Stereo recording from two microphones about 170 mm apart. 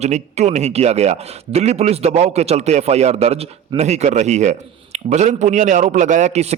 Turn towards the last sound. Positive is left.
turn(degrees=-40)  # may be behind; listen again after turning